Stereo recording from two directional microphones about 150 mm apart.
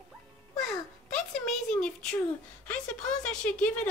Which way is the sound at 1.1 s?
5° left (ahead or behind).